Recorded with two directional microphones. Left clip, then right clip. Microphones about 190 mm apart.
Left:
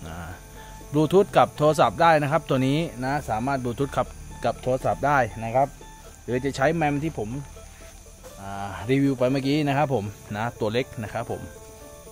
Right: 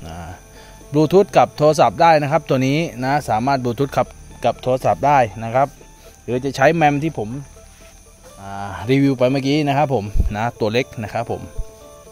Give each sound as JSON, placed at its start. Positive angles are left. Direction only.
{"t": 0.0, "sound": "music", "side_deg": -25}
{"t": 0.9, "sound": "speech", "side_deg": -30}
{"t": 3.0, "sound": "speech", "side_deg": -50}
{"t": 5.4, "sound": "speech", "side_deg": -60}
{"t": 6.2, "sound": "speech", "side_deg": -25}
{"t": 6.5, "sound": "speech", "side_deg": -45}
{"t": 8.4, "sound": "speech", "side_deg": -45}
{"t": 10.3, "sound": "speech", "side_deg": -35}